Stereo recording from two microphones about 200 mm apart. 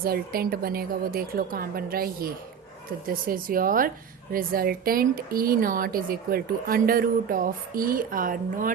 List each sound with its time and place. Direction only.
0.0 s a woman's voice: 45° right (ahead or behind)